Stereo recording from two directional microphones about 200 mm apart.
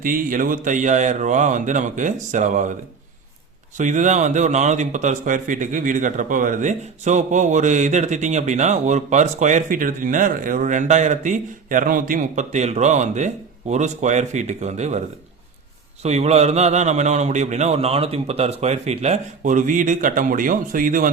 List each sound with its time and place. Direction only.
0.0 s a man's voice: 45° right (ahead or behind)
3.8 s a man's voice: 40° right (ahead or behind)
16.0 s a man's voice: 35° right (ahead or behind)